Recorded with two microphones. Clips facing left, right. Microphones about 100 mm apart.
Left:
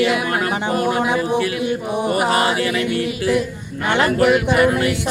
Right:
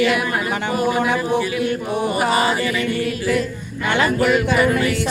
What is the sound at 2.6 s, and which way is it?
A capella, 65° left (ahead or behind).